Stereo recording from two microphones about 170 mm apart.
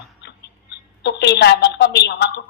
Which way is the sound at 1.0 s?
80° left.